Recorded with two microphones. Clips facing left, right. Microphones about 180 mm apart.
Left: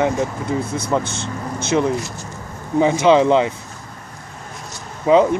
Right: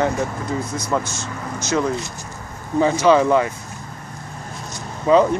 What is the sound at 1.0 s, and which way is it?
Speech, 60° left (ahead or behind).